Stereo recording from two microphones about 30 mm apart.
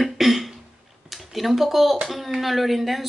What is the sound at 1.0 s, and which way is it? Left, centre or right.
Speech, centre.